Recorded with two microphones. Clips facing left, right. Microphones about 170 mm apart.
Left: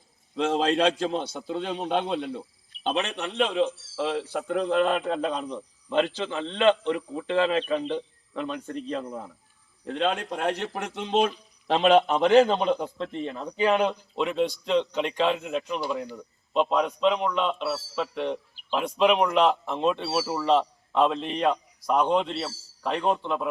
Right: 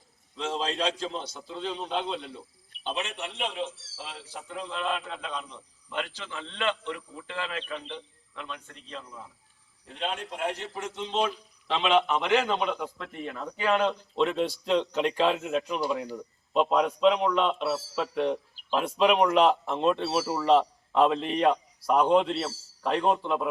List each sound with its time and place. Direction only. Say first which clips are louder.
0.3 s speech: left 7 dB; 60° left (ahead or behind)
2.8 s a man's voice: left 6 dB; 85° left; by 9.3 s 50° left (ahead or behind)
9.8 s speech: left 7 dB; 90° left; by 11.3 s 55° left (ahead or behind)
11.7 s a man's voice: left 5 dB; 45° left (ahead or behind); by 13.9 s 15° left (ahead or behind)
14.2 s speech: left 1 dB; centre (ahead or behind)